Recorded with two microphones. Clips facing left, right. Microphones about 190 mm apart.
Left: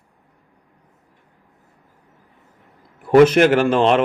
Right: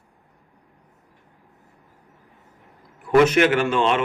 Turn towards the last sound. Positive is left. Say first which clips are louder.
# left 5 dB
turn(degrees=35)  # may be behind; listen again after turning